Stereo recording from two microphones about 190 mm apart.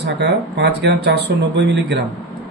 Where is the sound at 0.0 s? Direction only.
60° right (ahead or behind).